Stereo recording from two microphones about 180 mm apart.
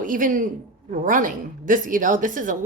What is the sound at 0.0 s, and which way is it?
A woman's voice, 50° right (ahead or behind).